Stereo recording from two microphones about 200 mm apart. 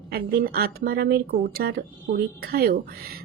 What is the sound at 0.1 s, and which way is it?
A woman's voice, 50° right (ahead or behind).